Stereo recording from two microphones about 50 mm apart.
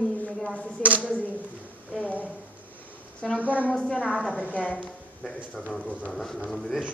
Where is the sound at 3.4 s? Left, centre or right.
Right.